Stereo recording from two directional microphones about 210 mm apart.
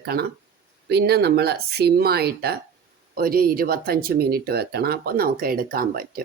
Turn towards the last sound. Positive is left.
turn(degrees=-45)  # may be behind; listen again after turning